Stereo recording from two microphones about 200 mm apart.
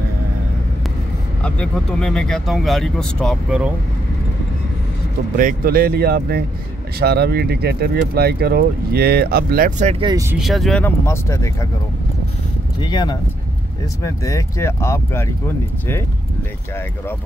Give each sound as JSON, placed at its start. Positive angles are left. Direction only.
{"t": 1.4, "sound": "speech", "side_deg": 5}
{"t": 5.4, "sound": "speech", "side_deg": -45}
{"t": 10.3, "sound": "speech", "side_deg": 0}
{"t": 12.8, "sound": "speech", "side_deg": 20}